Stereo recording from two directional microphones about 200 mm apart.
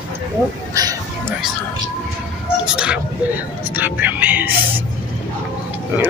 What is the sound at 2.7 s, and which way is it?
Speech, 5° right (ahead or behind).